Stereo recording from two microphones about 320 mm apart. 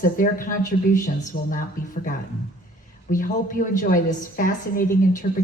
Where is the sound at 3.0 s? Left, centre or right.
Left.